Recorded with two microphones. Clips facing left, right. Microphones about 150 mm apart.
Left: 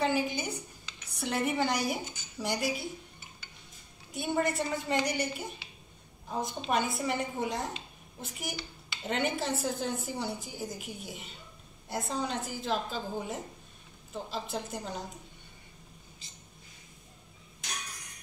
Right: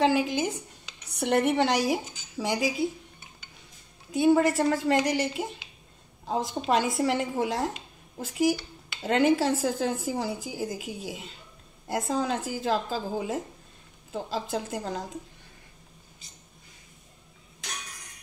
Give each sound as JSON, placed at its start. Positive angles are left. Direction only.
{"t": 0.0, "sound": "a sound", "side_deg": -90}
{"t": 1.1, "sound": "speech", "side_deg": -65}
{"t": 4.1, "sound": "a woman's voice", "side_deg": -90}